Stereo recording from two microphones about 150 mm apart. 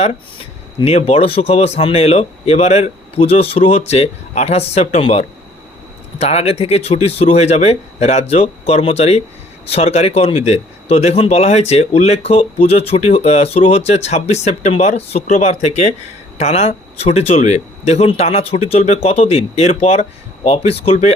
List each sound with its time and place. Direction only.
0.8 s speech: 45° left (ahead or behind)